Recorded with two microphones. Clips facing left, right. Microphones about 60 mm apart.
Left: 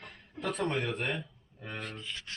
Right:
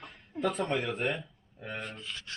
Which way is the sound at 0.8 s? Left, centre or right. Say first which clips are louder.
Right 2 dB; right.